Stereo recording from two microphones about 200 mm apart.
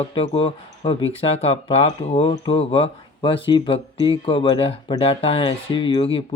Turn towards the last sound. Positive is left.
turn(degrees=30)  # may be behind; listen again after turning